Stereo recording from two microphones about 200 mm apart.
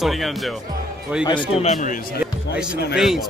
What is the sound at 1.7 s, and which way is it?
Speech, 40° left (ahead or behind).